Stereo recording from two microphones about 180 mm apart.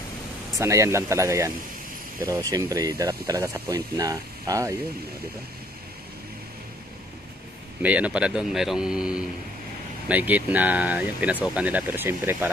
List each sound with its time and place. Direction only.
0.6 s speech: 15° right (ahead or behind)
7.8 s speech: 10° right (ahead or behind)